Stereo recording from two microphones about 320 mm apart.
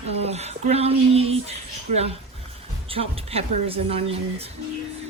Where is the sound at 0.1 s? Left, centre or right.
Centre.